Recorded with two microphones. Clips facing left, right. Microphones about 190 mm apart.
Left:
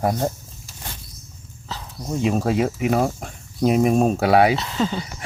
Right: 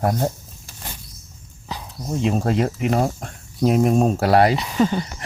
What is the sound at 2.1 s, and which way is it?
Speech, centre (ahead or behind).